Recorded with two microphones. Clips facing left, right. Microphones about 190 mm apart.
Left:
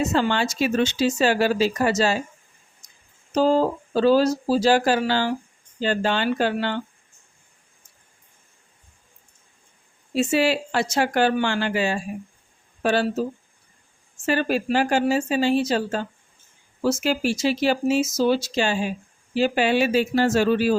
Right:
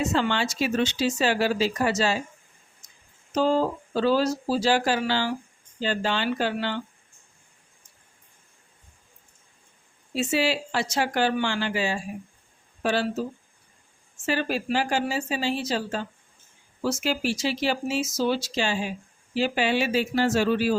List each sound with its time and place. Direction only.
0.0 s speech: 40° left (ahead or behind)
3.3 s speech: 40° left (ahead or behind)
10.2 s speech: 50° left (ahead or behind)
14.3 s speech: 50° left (ahead or behind)